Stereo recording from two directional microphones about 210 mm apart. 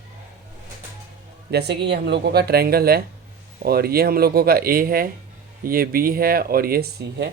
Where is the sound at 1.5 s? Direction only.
50° right (ahead or behind).